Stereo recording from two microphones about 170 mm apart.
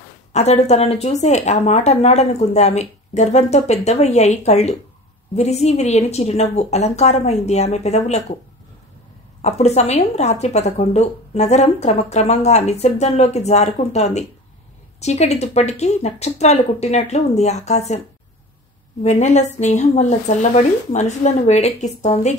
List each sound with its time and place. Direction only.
0.3 s a woman's voice: 40° left (ahead or behind)
9.4 s a woman's voice: 40° left (ahead or behind)
19.0 s speech: 45° left (ahead or behind)